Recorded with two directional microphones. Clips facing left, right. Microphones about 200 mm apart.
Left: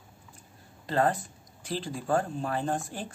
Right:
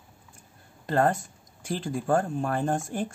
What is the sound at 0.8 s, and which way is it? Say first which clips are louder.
Speech: right 2 dB; 50° right (ahead or behind).